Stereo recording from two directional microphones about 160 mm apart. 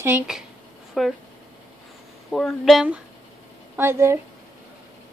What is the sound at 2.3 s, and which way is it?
Speech, 5° left (ahead or behind).